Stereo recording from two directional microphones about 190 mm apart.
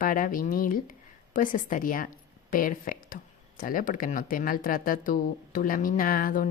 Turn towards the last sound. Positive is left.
turn(degrees=45)  # may be behind; listen again after turning